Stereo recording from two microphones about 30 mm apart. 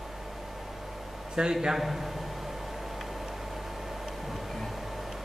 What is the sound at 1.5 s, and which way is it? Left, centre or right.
Speech, centre.